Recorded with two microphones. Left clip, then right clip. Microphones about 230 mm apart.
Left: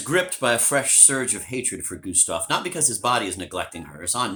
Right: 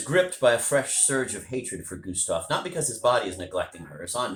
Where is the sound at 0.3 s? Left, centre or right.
Left.